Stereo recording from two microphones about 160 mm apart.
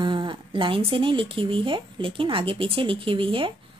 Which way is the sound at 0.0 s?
30° right (ahead or behind).